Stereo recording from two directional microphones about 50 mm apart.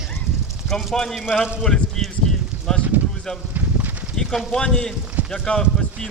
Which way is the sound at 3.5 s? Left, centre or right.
Right.